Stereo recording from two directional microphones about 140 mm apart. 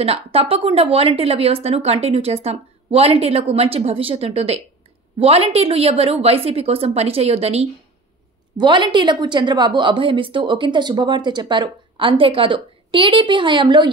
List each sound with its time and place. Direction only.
0.0 s a woman's voice: 45° right (ahead or behind)
8.5 s a woman's voice: 35° right (ahead or behind)